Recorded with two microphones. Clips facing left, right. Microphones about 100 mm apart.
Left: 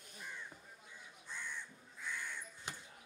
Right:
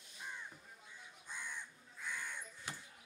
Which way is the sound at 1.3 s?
15° right (ahead or behind).